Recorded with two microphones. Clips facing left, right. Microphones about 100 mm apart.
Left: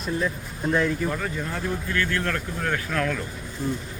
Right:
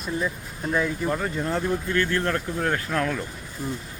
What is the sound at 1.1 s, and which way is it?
Speech, 30° right (ahead or behind).